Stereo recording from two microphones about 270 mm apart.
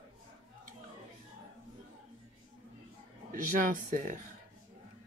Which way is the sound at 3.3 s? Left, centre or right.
Right.